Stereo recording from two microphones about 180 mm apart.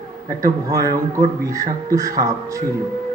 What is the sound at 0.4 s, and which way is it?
A man's voice, 20° right (ahead or behind).